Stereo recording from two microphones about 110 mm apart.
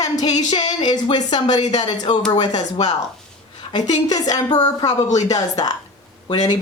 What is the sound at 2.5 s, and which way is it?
Speech, 90° left.